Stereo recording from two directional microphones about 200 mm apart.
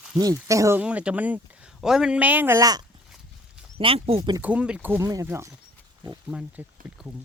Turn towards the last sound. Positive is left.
turn(degrees=-5)  # may be behind; listen again after turning